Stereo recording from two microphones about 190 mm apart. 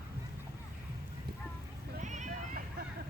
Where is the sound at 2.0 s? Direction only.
40° right (ahead or behind).